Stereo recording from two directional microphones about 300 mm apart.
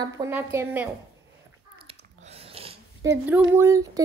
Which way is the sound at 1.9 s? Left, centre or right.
Centre.